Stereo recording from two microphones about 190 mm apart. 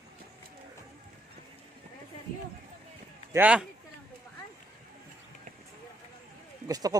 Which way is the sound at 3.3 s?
5° right (ahead or behind).